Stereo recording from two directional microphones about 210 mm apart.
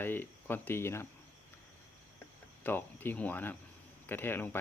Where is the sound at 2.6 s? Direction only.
10° left (ahead or behind).